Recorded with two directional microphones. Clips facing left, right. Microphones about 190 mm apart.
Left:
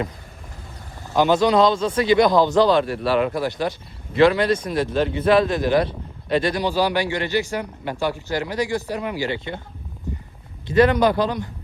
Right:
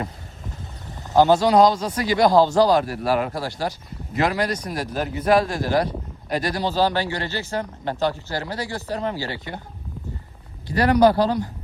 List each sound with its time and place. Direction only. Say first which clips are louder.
1.1 s speech: right 1 dB; 20° left (ahead or behind)
10.7 s speech: even; 20° left (ahead or behind)